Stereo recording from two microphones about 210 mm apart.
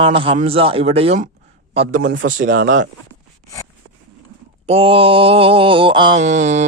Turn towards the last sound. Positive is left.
turn(degrees=-35)  # may be behind; listen again after turning